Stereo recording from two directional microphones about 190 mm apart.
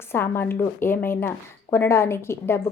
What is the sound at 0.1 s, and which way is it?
A woman's voice, 10° left (ahead or behind).